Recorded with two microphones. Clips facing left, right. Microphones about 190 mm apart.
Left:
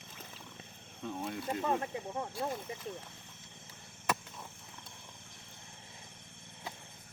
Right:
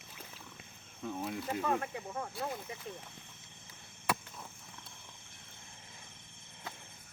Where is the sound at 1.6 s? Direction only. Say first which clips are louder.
Left 1 dB; 20° left (ahead or behind).